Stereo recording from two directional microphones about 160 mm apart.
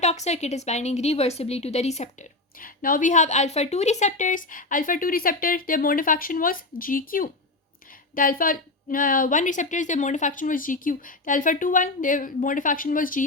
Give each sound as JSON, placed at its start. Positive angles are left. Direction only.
{"t": 0.0, "sound": "a woman's voice", "side_deg": 45}